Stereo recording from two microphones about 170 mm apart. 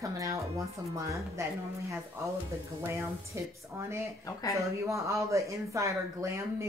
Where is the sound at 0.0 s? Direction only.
20° right (ahead or behind).